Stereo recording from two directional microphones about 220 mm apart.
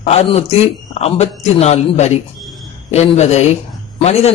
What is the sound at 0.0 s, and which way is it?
A man's voice, 25° left (ahead or behind).